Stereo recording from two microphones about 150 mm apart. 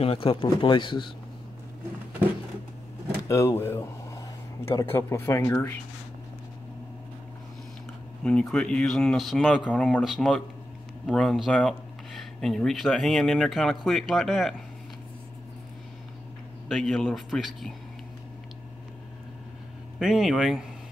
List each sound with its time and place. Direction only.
0.0 s speech: 40° left (ahead or behind)
3.3 s speech: 20° left (ahead or behind)
8.2 s speech: 5° left (ahead or behind)
16.6 s speech: centre (ahead or behind)
20.0 s speech: 5° right (ahead or behind)